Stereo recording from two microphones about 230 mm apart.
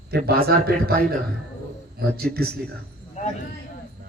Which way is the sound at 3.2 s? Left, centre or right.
Left.